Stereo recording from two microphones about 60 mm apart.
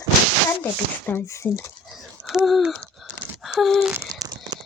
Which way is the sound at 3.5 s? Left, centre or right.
Centre.